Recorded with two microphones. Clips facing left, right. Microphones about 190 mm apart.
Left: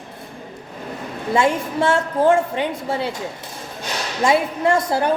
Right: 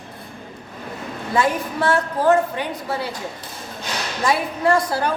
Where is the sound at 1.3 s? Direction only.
25° left (ahead or behind).